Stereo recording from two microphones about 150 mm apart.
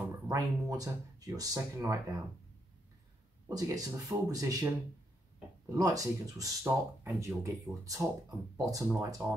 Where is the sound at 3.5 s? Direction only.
25° right (ahead or behind).